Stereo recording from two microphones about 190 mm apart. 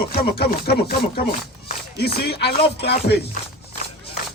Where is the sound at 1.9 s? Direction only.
55° left (ahead or behind).